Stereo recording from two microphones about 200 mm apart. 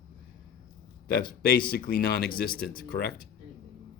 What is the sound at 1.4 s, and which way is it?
Speech, 50° left (ahead or behind).